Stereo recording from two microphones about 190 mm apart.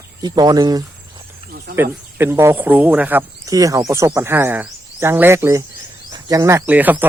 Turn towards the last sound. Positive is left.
turn(degrees=-10)  # may be behind; listen again after turning